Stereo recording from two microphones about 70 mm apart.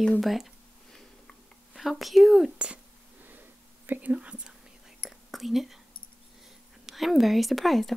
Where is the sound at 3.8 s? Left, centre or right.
Right.